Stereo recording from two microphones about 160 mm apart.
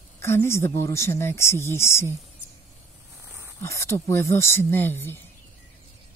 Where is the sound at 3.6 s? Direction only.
15° left (ahead or behind).